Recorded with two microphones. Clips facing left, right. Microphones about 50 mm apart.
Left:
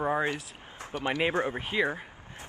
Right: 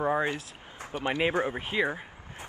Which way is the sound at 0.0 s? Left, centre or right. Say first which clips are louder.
Right 1 dB; centre.